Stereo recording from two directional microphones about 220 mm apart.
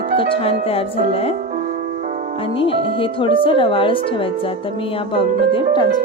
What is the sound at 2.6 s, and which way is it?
Speech, 25° left (ahead or behind).